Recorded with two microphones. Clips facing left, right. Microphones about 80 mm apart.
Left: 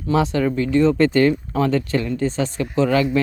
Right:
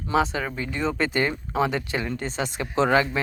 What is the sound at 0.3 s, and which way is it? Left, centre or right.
Speech, centre.